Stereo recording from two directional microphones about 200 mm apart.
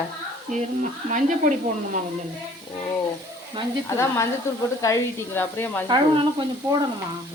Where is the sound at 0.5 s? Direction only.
40° right (ahead or behind).